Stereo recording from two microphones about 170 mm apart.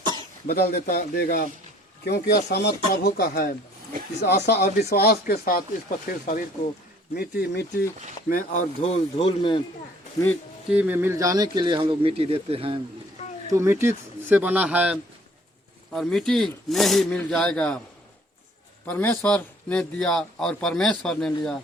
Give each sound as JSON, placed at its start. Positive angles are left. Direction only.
{"t": 0.4, "sound": "speech", "side_deg": 65}
{"t": 2.0, "sound": "speech", "side_deg": 75}
{"t": 4.4, "sound": "speech", "side_deg": 70}
{"t": 7.1, "sound": "speech", "side_deg": 70}
{"t": 8.3, "sound": "speech", "side_deg": 50}
{"t": 10.7, "sound": "speech", "side_deg": -10}
{"t": 13.5, "sound": "a man's voice", "side_deg": -15}
{"t": 15.9, "sound": "speech", "side_deg": 5}
{"t": 18.9, "sound": "speech", "side_deg": 10}